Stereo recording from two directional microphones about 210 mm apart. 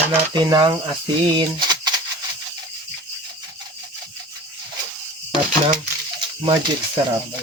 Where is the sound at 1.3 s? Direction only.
20° right (ahead or behind).